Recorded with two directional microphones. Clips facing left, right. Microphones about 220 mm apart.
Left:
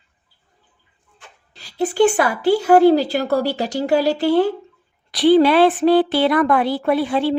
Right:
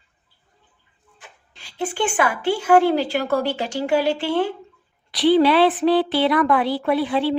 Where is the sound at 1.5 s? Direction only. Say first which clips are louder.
Left 5 dB; 40° left (ahead or behind).